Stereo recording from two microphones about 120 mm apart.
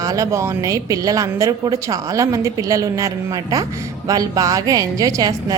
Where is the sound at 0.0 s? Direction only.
30° right (ahead or behind).